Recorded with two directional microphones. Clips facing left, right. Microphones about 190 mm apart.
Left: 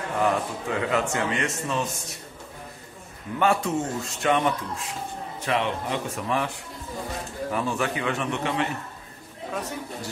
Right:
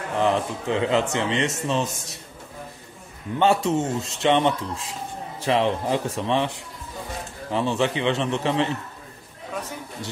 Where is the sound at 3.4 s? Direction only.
25° right (ahead or behind).